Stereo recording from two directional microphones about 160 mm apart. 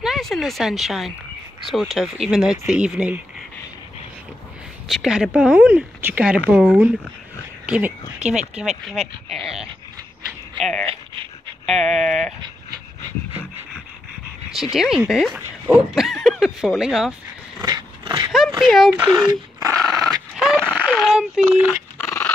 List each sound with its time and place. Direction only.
0.0 s speech: centre (ahead or behind)
4.8 s speech: 5° right (ahead or behind)
12.4 s dog: 25° right (ahead or behind)
14.5 s speech: centre (ahead or behind)
17.6 s dog: 25° right (ahead or behind)
18.6 s speech: centre (ahead or behind)
19.1 s dog: 20° right (ahead or behind)
20.5 s a sound: 10° right (ahead or behind)
21.9 s dog: 15° left (ahead or behind)